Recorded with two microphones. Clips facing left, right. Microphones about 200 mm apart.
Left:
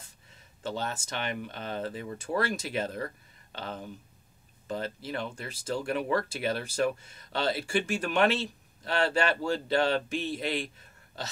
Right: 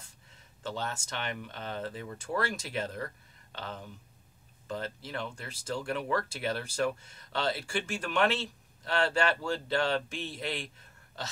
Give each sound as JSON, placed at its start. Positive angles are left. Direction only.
{"t": 0.7, "sound": "speech", "side_deg": 15}